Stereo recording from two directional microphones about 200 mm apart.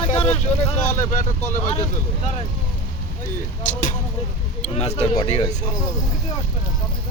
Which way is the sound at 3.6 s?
40° left (ahead or behind).